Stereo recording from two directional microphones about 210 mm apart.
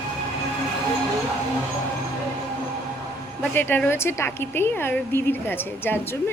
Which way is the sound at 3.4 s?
10° left (ahead or behind).